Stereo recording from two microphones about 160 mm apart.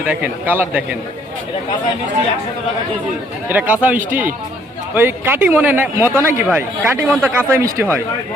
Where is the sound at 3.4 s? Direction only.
10° right (ahead or behind).